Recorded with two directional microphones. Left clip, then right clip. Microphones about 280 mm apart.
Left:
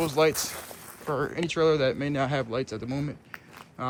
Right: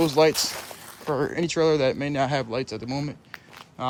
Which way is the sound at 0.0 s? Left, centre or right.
Centre.